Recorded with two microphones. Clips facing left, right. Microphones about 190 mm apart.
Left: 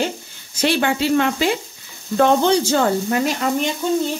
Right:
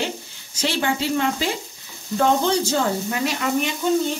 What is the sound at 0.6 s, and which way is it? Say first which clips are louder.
Speech: left 4 dB; 65° left (ahead or behind).